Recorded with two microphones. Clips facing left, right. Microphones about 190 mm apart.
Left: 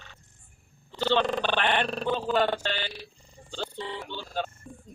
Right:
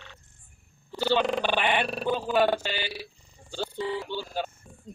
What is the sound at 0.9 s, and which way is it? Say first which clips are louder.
Speech: even; 10° right (ahead or behind).